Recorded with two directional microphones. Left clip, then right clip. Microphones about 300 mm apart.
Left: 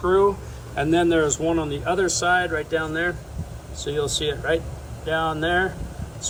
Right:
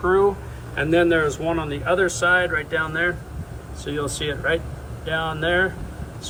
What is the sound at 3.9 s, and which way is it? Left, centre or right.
Speech, centre.